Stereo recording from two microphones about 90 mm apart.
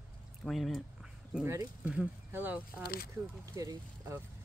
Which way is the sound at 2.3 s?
20° right (ahead or behind).